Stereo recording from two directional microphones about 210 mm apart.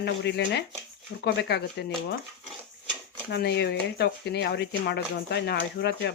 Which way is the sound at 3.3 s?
55° left (ahead or behind).